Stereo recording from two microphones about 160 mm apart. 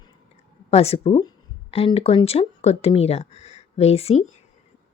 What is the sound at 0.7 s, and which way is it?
A woman's voice, 40° left (ahead or behind).